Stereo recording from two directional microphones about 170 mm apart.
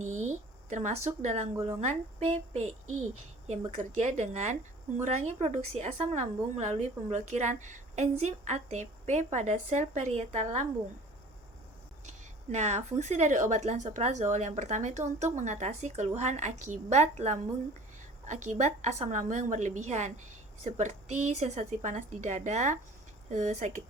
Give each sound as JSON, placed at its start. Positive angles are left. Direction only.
{"t": 0.0, "sound": "a sound", "side_deg": -45}
{"t": 1.8, "sound": "a woman's voice", "side_deg": -40}
{"t": 3.8, "sound": "a woman's voice", "side_deg": -45}
{"t": 12.0, "sound": "a woman's voice", "side_deg": -45}